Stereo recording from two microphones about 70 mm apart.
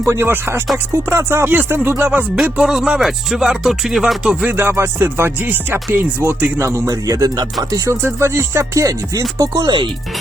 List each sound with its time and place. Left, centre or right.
0.0 s music: right
1.5 s speech: right
2.3 s speech: centre
4.4 s music: right
7.9 s music: right
9.4 s speech: right